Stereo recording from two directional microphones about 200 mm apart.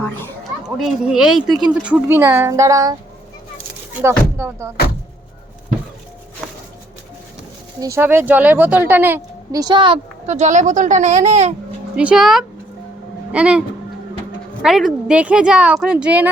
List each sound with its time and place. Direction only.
0.8 s a woman's voice: 5° right (ahead or behind)
4.0 s a woman's voice: 15° right (ahead or behind)
6.4 s music: centre (ahead or behind)
7.8 s speech: 15° right (ahead or behind); by 11.5 s 35° right (ahead or behind)
11.9 s speech: 5° right (ahead or behind)